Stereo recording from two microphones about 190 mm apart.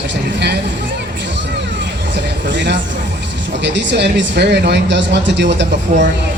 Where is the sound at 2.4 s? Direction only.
70° right (ahead or behind).